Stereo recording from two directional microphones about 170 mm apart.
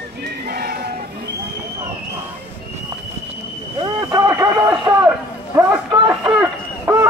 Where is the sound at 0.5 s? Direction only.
60° right (ahead or behind).